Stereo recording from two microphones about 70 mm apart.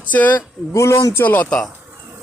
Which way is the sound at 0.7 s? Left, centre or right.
Left.